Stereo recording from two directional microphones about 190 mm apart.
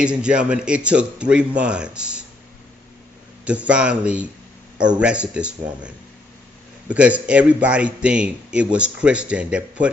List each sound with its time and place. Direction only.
0.0 s a man's voice: 5° right (ahead or behind)
3.4 s a man's voice: 5° right (ahead or behind)